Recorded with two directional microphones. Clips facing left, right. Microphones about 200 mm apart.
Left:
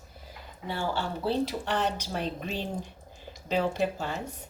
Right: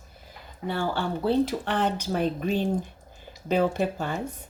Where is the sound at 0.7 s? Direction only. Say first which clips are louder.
Right 4 dB; 55° right (ahead or behind).